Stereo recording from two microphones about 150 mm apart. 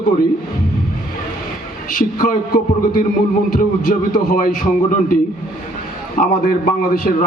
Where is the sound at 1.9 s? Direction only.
70° left (ahead or behind).